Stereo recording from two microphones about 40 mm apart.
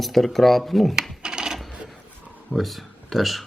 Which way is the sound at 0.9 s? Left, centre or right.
Centre.